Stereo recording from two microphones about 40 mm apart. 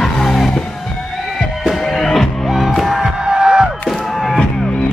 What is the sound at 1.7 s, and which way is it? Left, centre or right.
Music, centre.